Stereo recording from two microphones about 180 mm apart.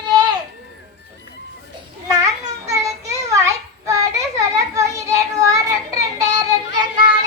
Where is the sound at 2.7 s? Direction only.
15° right (ahead or behind).